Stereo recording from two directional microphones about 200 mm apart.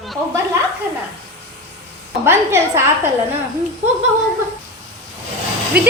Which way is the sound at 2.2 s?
15° right (ahead or behind).